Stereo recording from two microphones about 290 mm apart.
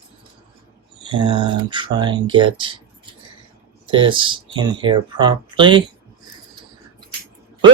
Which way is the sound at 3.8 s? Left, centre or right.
Centre.